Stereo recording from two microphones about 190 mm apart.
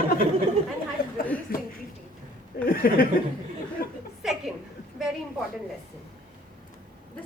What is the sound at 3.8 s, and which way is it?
Chuckle, 50° left (ahead or behind).